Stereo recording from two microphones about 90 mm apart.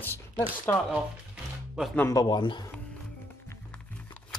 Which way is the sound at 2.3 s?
60° left (ahead or behind).